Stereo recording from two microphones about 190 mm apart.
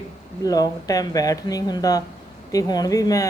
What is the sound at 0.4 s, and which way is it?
Speech, 20° left (ahead or behind).